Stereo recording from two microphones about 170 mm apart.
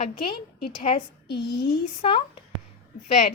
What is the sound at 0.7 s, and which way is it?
Speech, 35° left (ahead or behind).